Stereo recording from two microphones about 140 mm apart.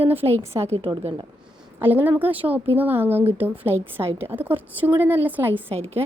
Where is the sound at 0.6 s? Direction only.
50° right (ahead or behind).